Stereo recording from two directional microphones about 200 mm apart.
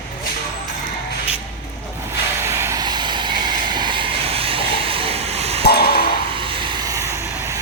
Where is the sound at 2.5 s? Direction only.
15° right (ahead or behind); by 5.6 s 30° right (ahead or behind).